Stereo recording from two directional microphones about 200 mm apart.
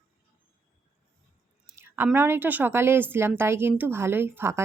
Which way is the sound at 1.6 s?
10° right (ahead or behind).